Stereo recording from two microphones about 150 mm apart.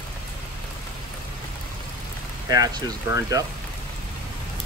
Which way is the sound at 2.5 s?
25° right (ahead or behind).